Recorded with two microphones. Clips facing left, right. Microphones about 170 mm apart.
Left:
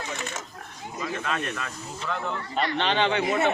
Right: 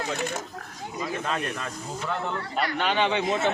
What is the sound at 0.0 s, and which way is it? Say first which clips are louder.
Speech: right 5 dB; 60° right (ahead or behind).